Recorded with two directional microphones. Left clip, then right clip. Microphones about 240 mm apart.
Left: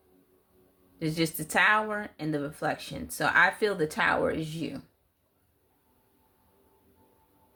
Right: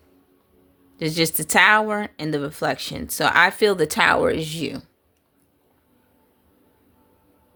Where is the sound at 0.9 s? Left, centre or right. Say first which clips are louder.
Right 8 dB; right.